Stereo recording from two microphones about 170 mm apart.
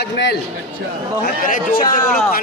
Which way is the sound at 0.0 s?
85° left.